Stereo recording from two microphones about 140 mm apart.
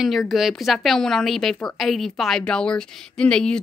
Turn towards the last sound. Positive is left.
turn(degrees=5)  # may be behind; listen again after turning